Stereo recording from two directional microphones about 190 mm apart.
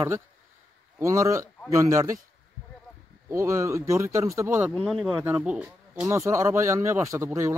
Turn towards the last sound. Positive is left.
turn(degrees=-15)  # may be behind; listen again after turning